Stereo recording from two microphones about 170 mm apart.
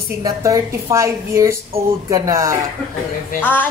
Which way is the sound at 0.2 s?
20° right (ahead or behind).